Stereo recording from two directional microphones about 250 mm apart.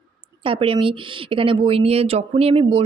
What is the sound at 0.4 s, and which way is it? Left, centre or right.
A woman's voice, right.